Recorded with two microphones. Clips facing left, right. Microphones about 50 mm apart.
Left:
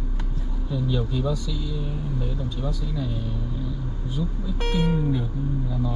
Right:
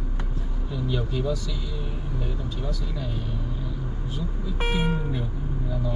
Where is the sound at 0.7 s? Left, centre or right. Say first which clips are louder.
Left 2 dB; centre.